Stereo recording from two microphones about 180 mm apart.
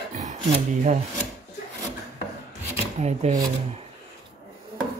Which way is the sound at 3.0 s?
40° right (ahead or behind).